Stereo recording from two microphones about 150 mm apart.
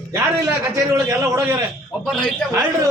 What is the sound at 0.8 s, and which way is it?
Speech, 20° right (ahead or behind).